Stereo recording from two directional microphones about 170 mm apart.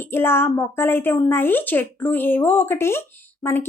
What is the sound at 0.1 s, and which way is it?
A woman's voice, 15° left (ahead or behind).